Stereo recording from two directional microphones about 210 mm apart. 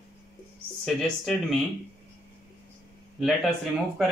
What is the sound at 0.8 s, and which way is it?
Speech, centre (ahead or behind).